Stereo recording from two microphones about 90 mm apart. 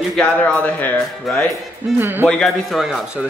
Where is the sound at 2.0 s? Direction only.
25° right (ahead or behind).